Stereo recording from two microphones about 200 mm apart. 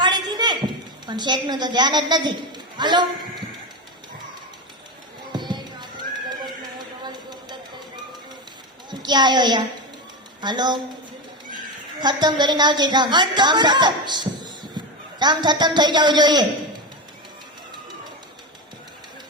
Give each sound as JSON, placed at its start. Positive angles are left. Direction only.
{"t": 0.0, "sound": "a sound", "side_deg": -20}
{"t": 1.0, "sound": "a woman's voice", "side_deg": -20}
{"t": 5.3, "sound": "music", "side_deg": -20}
{"t": 7.0, "sound": "a sound", "side_deg": -20}
{"t": 8.9, "sound": "a child's voice", "side_deg": -20}
{"t": 11.9, "sound": "a woman's voice", "side_deg": -20}